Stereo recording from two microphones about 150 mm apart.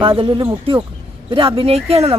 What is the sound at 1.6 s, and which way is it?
Speech, 40° right (ahead or behind).